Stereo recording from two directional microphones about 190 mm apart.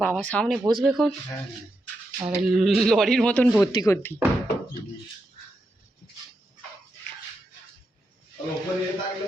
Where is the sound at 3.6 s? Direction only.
20° left (ahead or behind).